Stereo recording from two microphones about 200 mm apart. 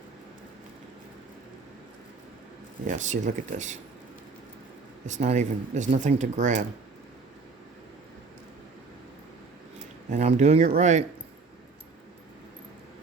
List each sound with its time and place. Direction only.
2.8 s speech: 35° right (ahead or behind)
5.0 s speech: 35° right (ahead or behind)
10.2 s speech: 35° right (ahead or behind)